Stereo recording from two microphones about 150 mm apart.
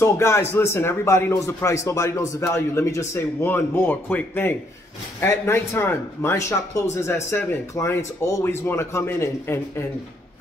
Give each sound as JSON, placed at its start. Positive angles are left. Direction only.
{"t": 0.0, "sound": "speech", "side_deg": 20}